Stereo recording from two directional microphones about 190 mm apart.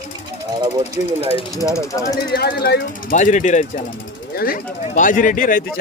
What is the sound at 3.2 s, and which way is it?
Speech, 40° left (ahead or behind).